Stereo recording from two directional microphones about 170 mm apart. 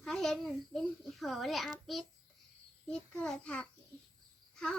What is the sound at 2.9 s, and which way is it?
Speech, 5° left (ahead or behind).